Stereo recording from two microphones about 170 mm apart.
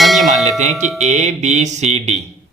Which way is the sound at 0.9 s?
40° right (ahead or behind).